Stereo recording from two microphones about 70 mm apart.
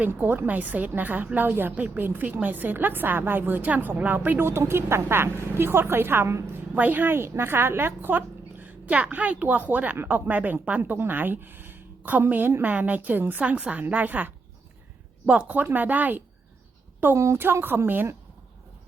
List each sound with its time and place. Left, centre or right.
0.2 s a woman's voice: right
6.7 s speech: right
17.2 s a woman's voice: right
17.4 s a woman's voice: right